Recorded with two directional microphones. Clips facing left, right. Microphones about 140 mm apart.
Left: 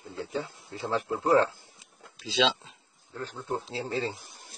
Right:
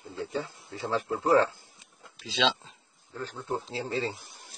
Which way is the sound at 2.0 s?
Centre (ahead or behind).